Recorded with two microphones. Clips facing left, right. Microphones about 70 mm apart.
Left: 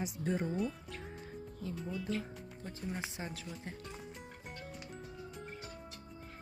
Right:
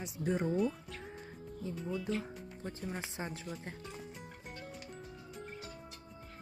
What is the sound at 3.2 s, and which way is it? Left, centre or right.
Speech, right.